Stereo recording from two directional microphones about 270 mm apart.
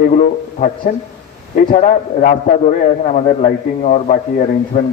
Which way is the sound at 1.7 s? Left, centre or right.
Left.